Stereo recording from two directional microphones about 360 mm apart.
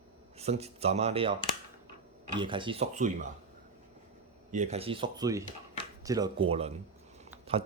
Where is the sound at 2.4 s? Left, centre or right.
Centre.